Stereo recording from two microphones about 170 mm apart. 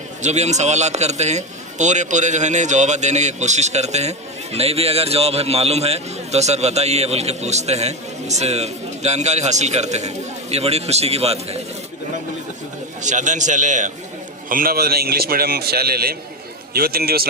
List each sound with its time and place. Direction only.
0.2 s a man's voice: 40° right (ahead or behind)
13.0 s a man's voice: 45° right (ahead or behind)
14.5 s a man's voice: 60° right (ahead or behind)